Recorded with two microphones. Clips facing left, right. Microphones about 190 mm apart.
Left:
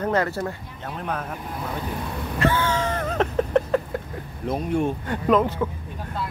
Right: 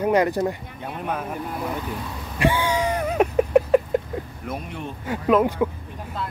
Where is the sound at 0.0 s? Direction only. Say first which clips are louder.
Right 4 dB; 15° right (ahead or behind).